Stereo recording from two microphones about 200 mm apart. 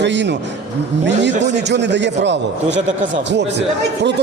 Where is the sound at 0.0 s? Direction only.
60° right (ahead or behind).